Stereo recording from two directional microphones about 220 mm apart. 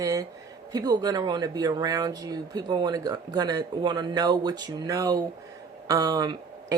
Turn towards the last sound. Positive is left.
turn(degrees=-15)  # may be behind; listen again after turning